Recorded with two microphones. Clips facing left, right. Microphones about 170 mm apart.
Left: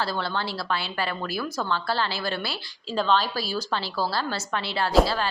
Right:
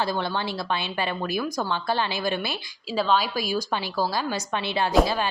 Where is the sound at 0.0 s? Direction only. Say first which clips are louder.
Right 2 dB; 15° right (ahead or behind).